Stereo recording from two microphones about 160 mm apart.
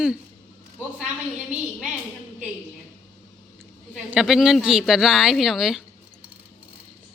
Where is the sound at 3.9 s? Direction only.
5° right (ahead or behind).